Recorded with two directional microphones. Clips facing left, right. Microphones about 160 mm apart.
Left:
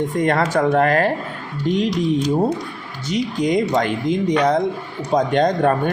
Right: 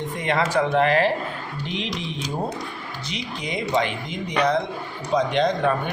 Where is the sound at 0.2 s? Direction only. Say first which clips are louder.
Left 3 dB; 45° left (ahead or behind).